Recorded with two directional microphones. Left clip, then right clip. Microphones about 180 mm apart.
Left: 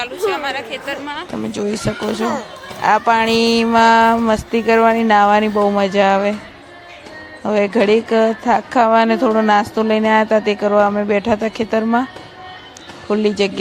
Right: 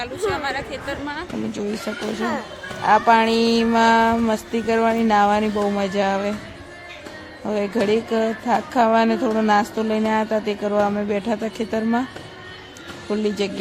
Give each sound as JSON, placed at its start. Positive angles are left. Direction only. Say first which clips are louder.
{"t": 0.0, "sound": "a woman's voice", "louder": "left 4 dB", "side_deg": -5}
{"t": 1.5, "sound": "a woman's voice", "louder": "left 8 dB", "side_deg": 15}
{"t": 7.4, "sound": "a woman's voice", "louder": "left 7 dB", "side_deg": 20}
{"t": 13.1, "sound": "a woman's voice", "louder": "left 7 dB", "side_deg": 20}